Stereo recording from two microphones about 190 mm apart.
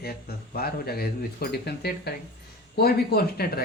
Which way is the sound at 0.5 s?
55° left (ahead or behind).